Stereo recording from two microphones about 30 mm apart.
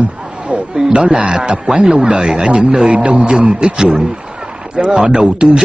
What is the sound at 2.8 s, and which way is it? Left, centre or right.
A man's voice, right.